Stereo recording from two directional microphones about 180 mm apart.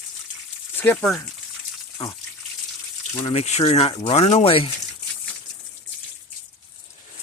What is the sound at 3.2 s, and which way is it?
Speech, 35° left (ahead or behind).